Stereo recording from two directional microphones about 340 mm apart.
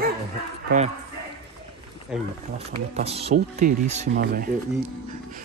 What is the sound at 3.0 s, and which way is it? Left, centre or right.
Speech, centre.